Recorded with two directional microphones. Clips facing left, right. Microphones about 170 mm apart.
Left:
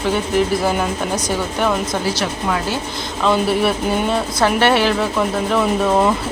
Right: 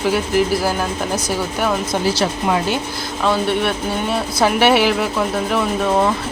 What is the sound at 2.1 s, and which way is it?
Speech, 25° right (ahead or behind).